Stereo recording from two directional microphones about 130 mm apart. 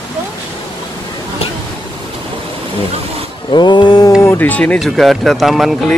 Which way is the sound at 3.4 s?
35° left (ahead or behind).